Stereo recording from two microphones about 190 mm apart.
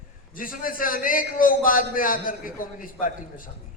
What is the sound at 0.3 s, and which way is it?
A man's voice, 45° left (ahead or behind).